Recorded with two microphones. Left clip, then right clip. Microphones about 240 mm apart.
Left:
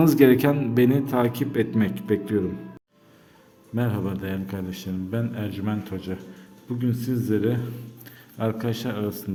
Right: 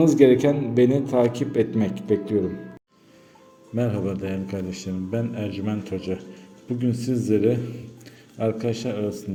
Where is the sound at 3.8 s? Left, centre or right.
Centre.